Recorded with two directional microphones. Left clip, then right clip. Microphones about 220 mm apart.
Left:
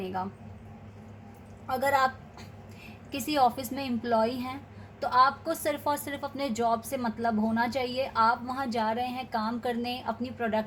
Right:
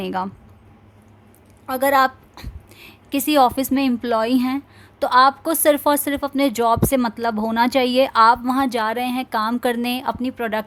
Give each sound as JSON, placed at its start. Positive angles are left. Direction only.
{"t": 1.8, "sound": "a woman's voice", "side_deg": -40}